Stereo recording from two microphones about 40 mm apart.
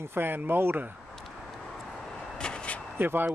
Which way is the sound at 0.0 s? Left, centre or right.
Right.